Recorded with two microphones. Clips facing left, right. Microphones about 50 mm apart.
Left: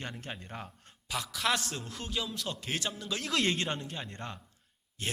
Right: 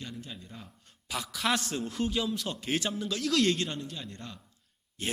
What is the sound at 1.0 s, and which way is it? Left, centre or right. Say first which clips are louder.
A man's voice: right 1 dB; centre.